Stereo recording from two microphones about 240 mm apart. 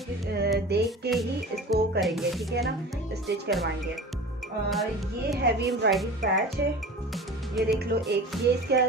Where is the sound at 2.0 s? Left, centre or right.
Centre.